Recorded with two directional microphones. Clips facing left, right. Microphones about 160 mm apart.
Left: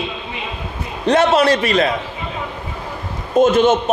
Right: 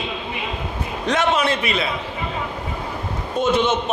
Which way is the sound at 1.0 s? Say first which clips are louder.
Left 7 dB; 35° left (ahead or behind).